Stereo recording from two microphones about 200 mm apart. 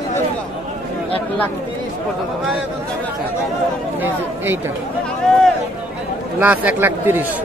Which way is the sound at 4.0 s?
10° right (ahead or behind).